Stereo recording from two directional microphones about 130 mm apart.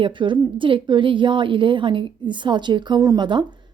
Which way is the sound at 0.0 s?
40° right (ahead or behind).